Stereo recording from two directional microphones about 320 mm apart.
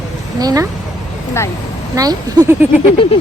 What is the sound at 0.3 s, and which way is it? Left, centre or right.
Speech, centre.